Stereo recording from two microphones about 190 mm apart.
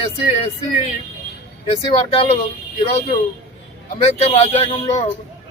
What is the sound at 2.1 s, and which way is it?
Speech, 30° left (ahead or behind).